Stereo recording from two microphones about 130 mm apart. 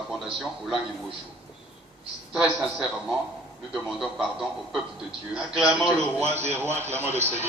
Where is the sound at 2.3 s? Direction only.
5° right (ahead or behind).